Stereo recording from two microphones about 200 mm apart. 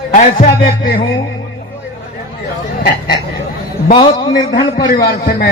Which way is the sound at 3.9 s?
20° left (ahead or behind).